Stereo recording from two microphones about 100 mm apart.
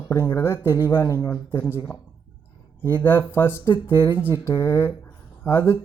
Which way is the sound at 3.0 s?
20° left (ahead or behind).